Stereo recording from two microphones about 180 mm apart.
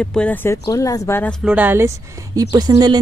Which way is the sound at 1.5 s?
10° right (ahead or behind).